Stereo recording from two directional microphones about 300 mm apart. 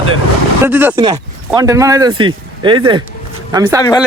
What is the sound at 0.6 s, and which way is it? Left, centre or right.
Speech, centre.